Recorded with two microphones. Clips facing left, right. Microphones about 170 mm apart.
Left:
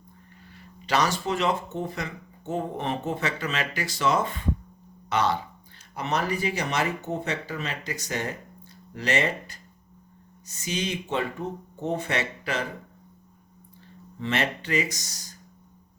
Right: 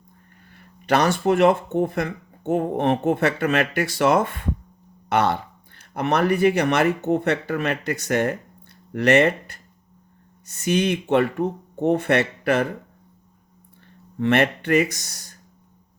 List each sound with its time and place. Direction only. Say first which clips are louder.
0.5 s speech: right 5 dB; 55° right (ahead or behind)
14.2 s speech: right 8 dB; 60° right (ahead or behind)